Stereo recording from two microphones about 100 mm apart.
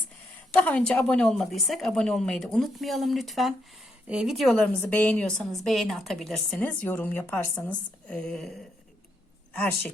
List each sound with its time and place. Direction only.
0.5 s a woman's voice: 15° left (ahead or behind); by 4.4 s 5° right (ahead or behind)
4.8 s a woman's voice: 15° left (ahead or behind)
5.4 s a woman's voice: centre (ahead or behind)
6.6 s a woman's voice: 20° left (ahead or behind)
8.0 s a woman's voice: 10° left (ahead or behind)